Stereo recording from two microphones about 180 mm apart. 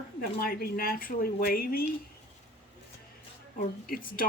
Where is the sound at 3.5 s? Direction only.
50° left (ahead or behind).